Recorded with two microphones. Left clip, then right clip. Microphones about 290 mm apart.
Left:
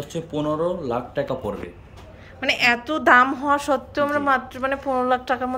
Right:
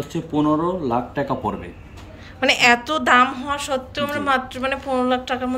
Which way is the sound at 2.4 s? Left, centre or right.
Centre.